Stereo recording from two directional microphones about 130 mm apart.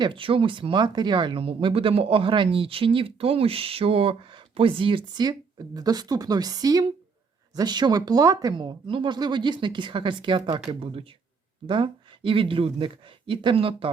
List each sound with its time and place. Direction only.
0.0 s speech: 40° right (ahead or behind)